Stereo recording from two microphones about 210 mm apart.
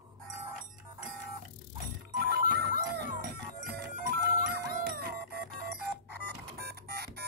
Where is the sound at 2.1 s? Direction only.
50° right (ahead or behind).